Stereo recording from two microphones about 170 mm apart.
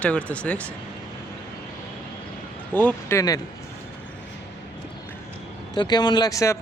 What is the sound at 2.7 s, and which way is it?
Speech, 10° left (ahead or behind).